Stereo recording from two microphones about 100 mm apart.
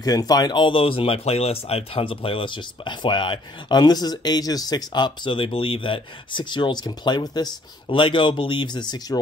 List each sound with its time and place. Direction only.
0.0 s speech: 40° left (ahead or behind)
7.9 s speech: 55° left (ahead or behind)